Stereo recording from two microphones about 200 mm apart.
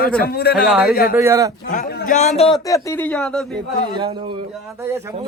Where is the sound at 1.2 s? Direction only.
15° right (ahead or behind).